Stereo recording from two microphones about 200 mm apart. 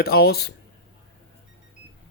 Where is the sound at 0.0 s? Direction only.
50° left (ahead or behind).